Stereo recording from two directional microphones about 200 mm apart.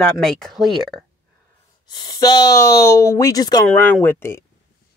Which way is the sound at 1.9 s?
20° left (ahead or behind).